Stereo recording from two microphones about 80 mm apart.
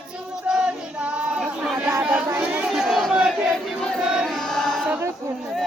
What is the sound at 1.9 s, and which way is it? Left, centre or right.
Chatter, right.